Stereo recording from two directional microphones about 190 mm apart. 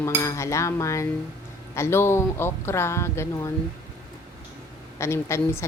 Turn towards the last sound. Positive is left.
turn(degrees=15)  # may be behind; listen again after turning